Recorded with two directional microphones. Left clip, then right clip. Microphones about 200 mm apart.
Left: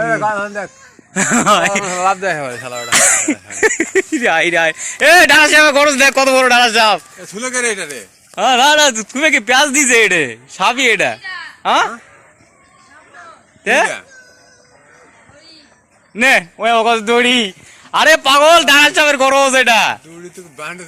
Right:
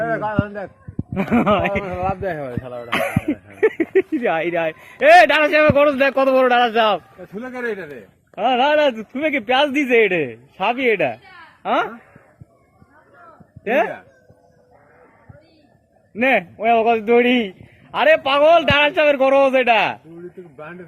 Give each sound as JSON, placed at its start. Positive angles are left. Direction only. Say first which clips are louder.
{"t": 0.0, "sound": "speech", "louder": "left 6 dB", "side_deg": 30}
{"t": 1.1, "sound": "speech", "louder": "left 6 dB", "side_deg": 10}
{"t": 7.3, "sound": "speech", "louder": "left 8 dB", "side_deg": -30}
{"t": 8.4, "sound": "speech", "louder": "left 6 dB", "side_deg": 10}
{"t": 13.7, "sound": "speech", "louder": "left 6 dB", "side_deg": 5}
{"t": 16.1, "sound": "speech", "louder": "left 6 dB", "side_deg": 5}